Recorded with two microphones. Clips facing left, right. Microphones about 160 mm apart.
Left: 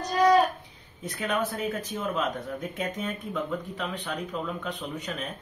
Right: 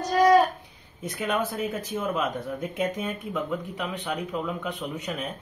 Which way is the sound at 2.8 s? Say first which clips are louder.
Right 5 dB; 10° right (ahead or behind).